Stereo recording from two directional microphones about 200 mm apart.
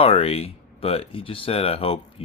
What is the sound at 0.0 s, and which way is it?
Speech, 30° left (ahead or behind).